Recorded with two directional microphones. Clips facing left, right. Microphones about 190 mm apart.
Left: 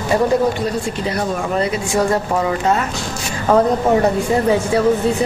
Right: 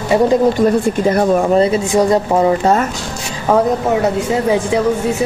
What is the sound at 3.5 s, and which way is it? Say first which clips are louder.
Speech: even; 5° right (ahead or behind).